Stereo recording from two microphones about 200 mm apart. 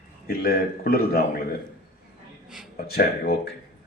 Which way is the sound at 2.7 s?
50° left (ahead or behind).